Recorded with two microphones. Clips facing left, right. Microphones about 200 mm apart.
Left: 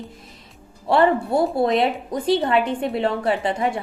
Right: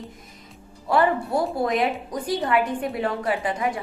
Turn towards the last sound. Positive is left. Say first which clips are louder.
# left 3 dB
turn(degrees=30)  # may be behind; listen again after turning